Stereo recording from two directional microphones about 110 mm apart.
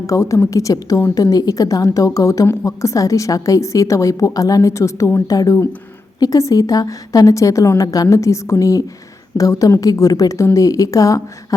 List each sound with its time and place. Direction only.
0.1 s a woman's voice: 30° left (ahead or behind)